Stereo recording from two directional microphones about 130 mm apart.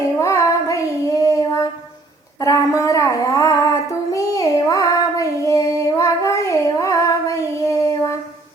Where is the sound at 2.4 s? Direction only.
25° left (ahead or behind).